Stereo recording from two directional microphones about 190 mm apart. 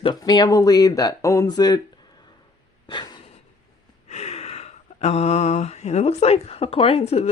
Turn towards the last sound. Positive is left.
turn(degrees=35)  # may be behind; listen again after turning